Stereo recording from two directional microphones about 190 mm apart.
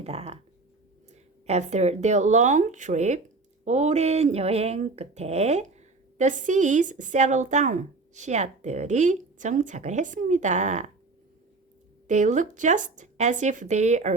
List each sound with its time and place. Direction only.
0.0 s speech: 30° right (ahead or behind)
1.5 s speech: 35° right (ahead or behind)
12.0 s speech: 40° right (ahead or behind)